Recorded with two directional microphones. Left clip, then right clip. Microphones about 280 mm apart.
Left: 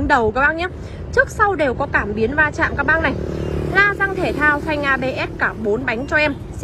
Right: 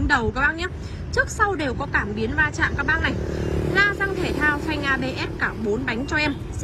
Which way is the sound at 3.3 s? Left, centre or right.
Right.